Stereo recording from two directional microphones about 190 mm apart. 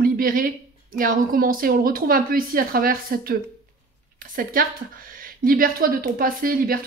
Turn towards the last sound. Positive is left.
turn(degrees=-50)  # may be behind; listen again after turning